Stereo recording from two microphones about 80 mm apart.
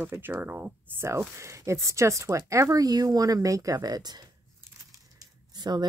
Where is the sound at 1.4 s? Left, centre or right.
Right.